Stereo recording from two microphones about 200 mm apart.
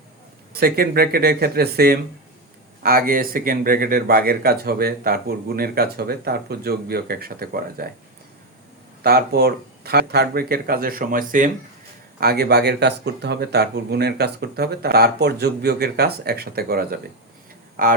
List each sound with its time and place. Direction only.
0.5 s speech: 50° right (ahead or behind)
9.0 s speech: 50° right (ahead or behind)
12.2 s speech: 50° right (ahead or behind)